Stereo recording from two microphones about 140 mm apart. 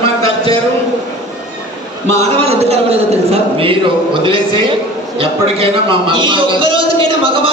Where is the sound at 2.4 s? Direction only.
50° right (ahead or behind).